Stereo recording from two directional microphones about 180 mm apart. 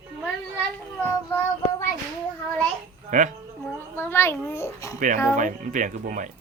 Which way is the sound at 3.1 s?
45° right (ahead or behind).